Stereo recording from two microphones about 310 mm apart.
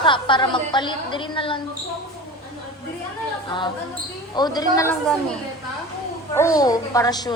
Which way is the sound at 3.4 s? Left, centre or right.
Centre.